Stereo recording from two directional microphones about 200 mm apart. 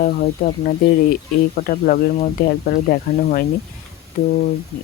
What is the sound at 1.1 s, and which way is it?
Speech, 50° left (ahead or behind).